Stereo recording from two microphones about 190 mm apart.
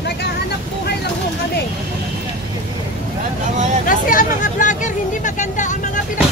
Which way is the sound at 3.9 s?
45° left (ahead or behind).